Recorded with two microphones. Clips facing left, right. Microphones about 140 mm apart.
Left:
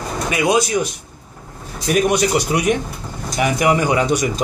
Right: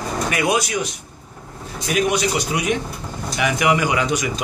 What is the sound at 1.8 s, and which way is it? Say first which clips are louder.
Speech: left 3 dB; 45° left (ahead or behind).